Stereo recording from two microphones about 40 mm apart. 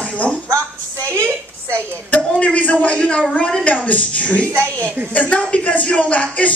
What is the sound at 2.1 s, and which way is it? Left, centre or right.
A woman's voice, left.